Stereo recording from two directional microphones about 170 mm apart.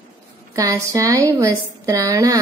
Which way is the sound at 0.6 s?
20° right (ahead or behind).